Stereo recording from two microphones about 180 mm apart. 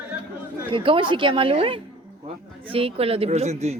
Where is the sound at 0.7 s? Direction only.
30° right (ahead or behind).